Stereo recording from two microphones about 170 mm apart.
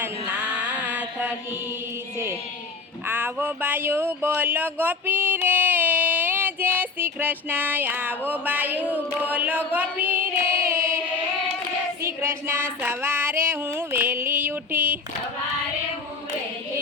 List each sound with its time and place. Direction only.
0.0 s mantra: 10° right (ahead or behind)
3.1 s speech: 10° right (ahead or behind)
8.3 s female singing: 10° right (ahead or behind)
10.6 s chant: 15° right (ahead or behind)
12.0 s female singing: 15° right (ahead or behind)